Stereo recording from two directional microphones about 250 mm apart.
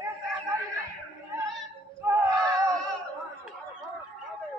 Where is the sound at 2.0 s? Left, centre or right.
Centre.